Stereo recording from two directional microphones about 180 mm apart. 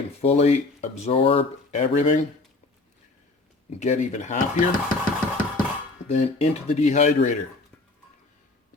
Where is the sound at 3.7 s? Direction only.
40° left (ahead or behind).